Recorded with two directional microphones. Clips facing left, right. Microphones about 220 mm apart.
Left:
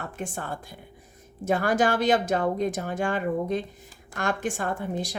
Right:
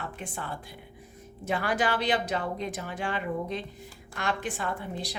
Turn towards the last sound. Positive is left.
turn(degrees=45)  # may be behind; listen again after turning